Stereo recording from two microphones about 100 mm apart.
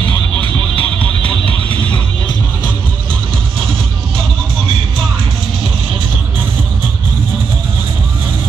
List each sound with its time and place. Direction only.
0.7 s music: 60° right (ahead or behind)